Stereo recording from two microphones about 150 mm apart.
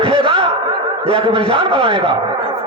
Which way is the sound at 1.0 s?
35° right (ahead or behind).